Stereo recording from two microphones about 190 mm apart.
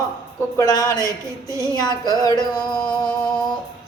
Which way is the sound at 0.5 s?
20° left (ahead or behind).